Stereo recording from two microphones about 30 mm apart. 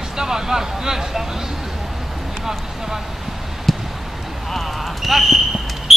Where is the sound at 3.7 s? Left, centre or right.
Centre.